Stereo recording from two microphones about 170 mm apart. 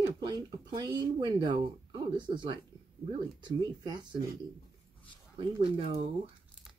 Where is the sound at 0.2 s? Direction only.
25° right (ahead or behind).